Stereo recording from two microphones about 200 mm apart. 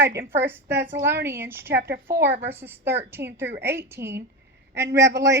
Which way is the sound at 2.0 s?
10° right (ahead or behind).